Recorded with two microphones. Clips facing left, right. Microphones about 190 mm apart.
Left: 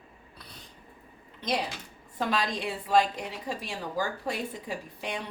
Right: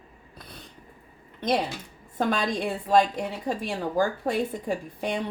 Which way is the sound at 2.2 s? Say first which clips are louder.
Right 4 dB; 50° right (ahead or behind).